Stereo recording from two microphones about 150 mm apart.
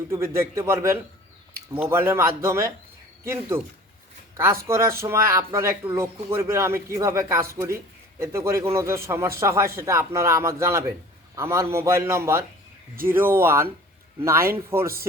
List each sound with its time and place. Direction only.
0.1 s a man's voice: 15° right (ahead or behind)
4.6 s a man's voice: 20° right (ahead or behind)